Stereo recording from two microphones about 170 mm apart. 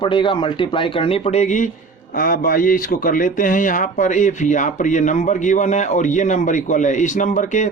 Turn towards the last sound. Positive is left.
turn(degrees=45)  # may be behind; listen again after turning